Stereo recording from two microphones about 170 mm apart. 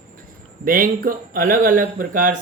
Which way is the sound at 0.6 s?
55° right (ahead or behind).